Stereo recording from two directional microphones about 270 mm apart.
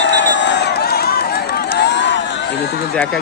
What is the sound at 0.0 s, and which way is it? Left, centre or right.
Run, left.